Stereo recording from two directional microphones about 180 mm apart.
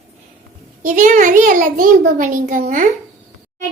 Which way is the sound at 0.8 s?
45° right (ahead or behind).